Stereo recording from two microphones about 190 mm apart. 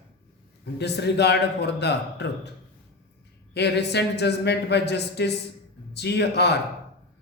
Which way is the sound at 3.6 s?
60° left (ahead or behind).